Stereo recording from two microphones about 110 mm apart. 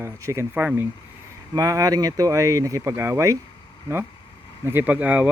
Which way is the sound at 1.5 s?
35° right (ahead or behind).